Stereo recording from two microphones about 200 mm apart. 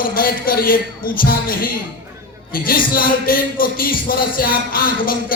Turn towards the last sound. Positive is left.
turn(degrees=45)  # may be behind; listen again after turning